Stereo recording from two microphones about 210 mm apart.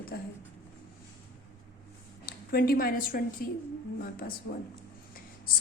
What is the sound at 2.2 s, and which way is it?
Speech, 45° left (ahead or behind).